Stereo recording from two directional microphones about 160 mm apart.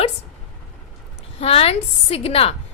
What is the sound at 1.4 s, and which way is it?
A woman's voice, 40° left (ahead or behind).